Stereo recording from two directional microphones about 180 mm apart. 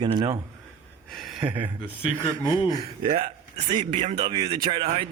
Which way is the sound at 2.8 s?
30° right (ahead or behind).